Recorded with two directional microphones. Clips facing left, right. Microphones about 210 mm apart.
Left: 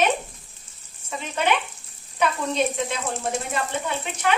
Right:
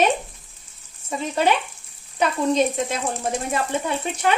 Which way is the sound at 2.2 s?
40° right (ahead or behind).